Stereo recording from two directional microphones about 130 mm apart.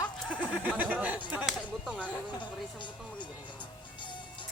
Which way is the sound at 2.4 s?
35° left (ahead or behind).